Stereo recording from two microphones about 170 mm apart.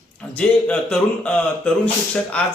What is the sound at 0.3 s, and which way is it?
Speech, 5° left (ahead or behind).